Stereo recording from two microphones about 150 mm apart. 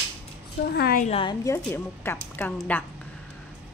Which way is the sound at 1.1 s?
35° left (ahead or behind).